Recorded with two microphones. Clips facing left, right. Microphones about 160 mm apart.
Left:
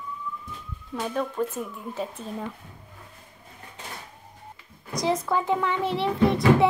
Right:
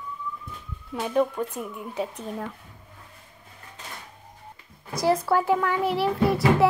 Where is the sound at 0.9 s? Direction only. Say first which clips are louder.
Right 3 dB; 10° right (ahead or behind).